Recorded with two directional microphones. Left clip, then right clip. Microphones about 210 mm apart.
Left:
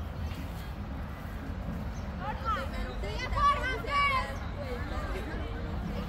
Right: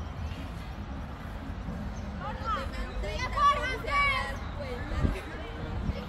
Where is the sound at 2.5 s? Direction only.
55° left (ahead or behind).